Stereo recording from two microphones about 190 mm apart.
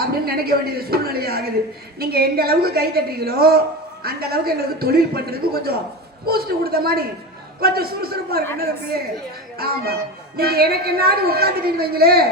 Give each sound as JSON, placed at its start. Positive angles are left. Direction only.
{"t": 0.0, "sound": "a woman's voice", "side_deg": -55}
{"t": 9.6, "sound": "a woman's voice", "side_deg": -55}